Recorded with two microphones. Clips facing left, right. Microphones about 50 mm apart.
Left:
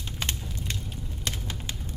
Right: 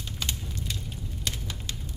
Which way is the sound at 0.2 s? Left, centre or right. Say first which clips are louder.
Left 1 dB; left.